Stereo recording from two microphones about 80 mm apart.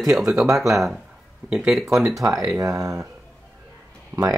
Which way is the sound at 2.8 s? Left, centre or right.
Right.